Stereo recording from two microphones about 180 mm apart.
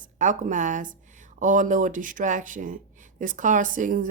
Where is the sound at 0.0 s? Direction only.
45° right (ahead or behind).